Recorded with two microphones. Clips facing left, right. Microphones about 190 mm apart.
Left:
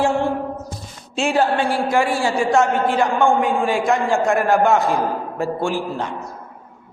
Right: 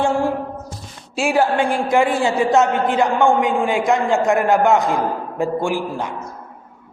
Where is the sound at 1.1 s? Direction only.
10° right (ahead or behind).